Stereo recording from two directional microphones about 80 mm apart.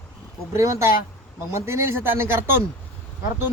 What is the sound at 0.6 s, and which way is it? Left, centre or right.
Speech, right.